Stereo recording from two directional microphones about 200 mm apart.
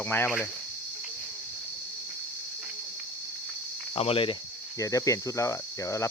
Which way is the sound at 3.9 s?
25° left (ahead or behind).